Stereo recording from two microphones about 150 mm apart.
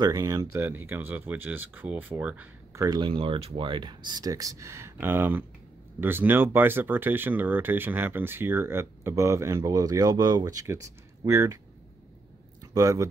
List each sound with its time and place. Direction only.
0.0 s speech: 25° right (ahead or behind)
2.7 s speech: 25° right (ahead or behind)
12.7 s speech: 20° right (ahead or behind)